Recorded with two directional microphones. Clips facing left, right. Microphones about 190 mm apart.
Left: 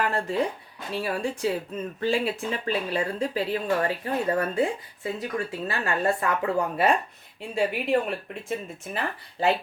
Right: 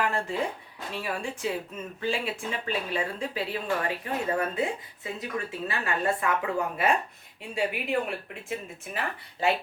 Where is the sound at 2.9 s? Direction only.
40° left (ahead or behind).